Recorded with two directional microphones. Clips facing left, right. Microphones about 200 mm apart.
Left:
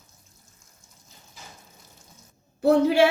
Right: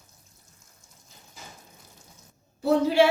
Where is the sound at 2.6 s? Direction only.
60° left (ahead or behind).